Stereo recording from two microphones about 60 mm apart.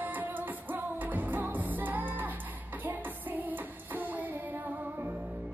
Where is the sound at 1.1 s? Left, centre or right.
Right.